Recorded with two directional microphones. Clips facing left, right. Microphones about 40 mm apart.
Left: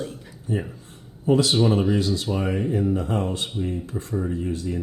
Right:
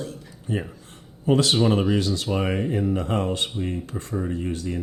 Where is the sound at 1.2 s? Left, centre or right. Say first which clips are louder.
Left 1 dB; right.